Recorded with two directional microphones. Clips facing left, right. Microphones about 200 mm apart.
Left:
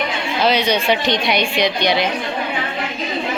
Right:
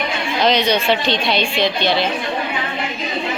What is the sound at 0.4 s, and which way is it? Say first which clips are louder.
A woman's voice: even; 10° left (ahead or behind).